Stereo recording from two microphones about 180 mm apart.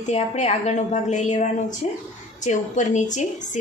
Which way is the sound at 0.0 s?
40° left (ahead or behind).